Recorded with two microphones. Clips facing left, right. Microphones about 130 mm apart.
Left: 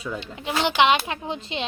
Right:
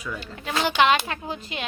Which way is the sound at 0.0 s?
25° left (ahead or behind).